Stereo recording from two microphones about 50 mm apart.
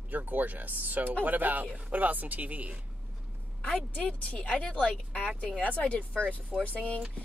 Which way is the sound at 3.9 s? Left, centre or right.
Left.